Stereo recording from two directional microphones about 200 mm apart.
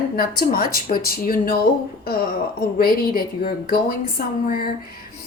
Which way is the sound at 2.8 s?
50° left (ahead or behind).